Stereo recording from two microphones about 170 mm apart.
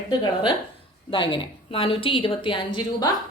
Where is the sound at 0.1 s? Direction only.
25° left (ahead or behind).